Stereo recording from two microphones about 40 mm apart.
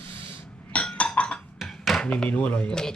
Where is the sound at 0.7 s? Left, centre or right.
Left.